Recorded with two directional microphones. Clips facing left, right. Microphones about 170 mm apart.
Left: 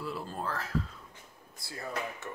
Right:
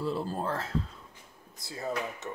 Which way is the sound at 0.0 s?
30° right (ahead or behind).